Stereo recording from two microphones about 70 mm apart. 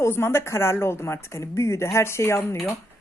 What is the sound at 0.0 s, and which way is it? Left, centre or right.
A woman's voice, left.